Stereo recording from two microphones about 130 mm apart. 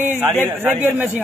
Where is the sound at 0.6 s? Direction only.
15° right (ahead or behind).